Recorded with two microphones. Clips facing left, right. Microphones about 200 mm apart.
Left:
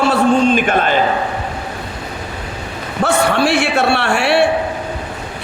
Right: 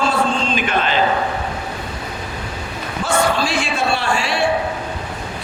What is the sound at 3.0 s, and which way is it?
A man's voice, 65° left (ahead or behind).